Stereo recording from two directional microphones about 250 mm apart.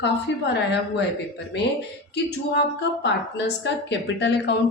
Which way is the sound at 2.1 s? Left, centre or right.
Left.